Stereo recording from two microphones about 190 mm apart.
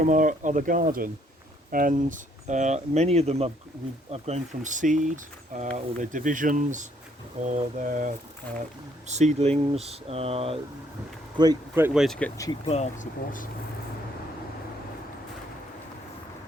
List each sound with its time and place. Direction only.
0.0 s speech: 45° right (ahead or behind)
11.7 s speech: 10° right (ahead or behind)
12.0 s speech: 5° left (ahead or behind)
12.6 s speech: 35° left (ahead or behind)